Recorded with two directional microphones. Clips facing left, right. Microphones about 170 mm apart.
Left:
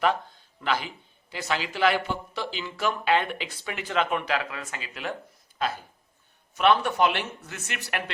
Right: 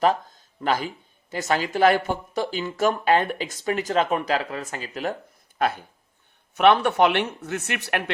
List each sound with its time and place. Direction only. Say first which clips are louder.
0.0 s speech: right 4 dB; 40° right (ahead or behind)
6.5 s speech: right 4 dB; 60° right (ahead or behind)